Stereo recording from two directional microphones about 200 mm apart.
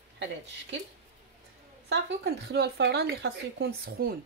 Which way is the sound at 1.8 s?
55° right (ahead or behind).